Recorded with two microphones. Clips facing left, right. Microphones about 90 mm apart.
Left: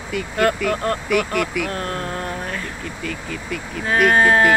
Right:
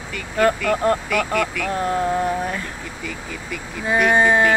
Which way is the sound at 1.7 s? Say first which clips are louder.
Right 6 dB; 15° right (ahead or behind).